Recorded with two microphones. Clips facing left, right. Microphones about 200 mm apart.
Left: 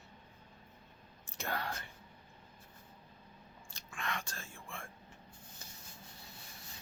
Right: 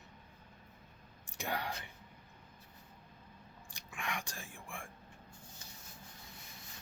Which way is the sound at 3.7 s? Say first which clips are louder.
Even; 15° right (ahead or behind).